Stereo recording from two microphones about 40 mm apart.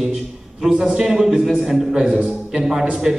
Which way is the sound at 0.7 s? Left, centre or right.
Right.